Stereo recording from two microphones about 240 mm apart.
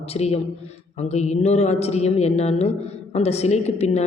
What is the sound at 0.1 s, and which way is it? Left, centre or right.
Speech, left.